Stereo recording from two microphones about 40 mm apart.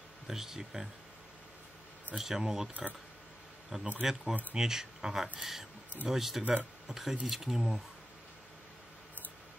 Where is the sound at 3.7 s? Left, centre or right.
Centre.